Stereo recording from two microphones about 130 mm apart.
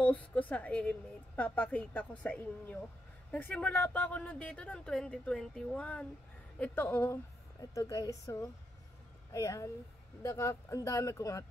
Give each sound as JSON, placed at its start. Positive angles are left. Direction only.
{"t": 0.0, "sound": "a woman's voice", "side_deg": 10}